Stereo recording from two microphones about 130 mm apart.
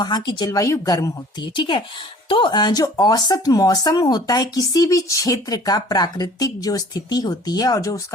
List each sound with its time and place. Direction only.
0.0 s speech: 35° left (ahead or behind)